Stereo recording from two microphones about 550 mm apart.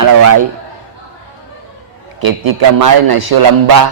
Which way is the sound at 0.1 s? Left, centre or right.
Right.